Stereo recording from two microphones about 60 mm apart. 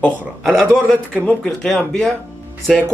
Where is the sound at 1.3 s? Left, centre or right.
Centre.